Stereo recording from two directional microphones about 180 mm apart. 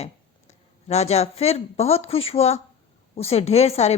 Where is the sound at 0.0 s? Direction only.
35° left (ahead or behind).